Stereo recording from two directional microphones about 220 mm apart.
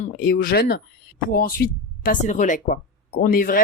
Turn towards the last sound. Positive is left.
turn(degrees=40)  # may be behind; listen again after turning